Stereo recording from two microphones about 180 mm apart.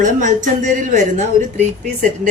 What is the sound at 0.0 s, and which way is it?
A woman's voice, 45° right (ahead or behind).